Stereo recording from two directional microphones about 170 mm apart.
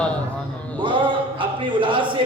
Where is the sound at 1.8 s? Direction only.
30° right (ahead or behind).